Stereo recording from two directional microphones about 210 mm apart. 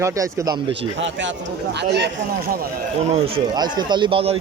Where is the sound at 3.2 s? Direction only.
25° right (ahead or behind).